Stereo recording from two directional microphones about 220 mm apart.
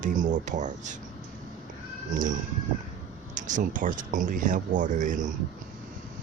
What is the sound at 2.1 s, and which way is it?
Speech, 35° right (ahead or behind).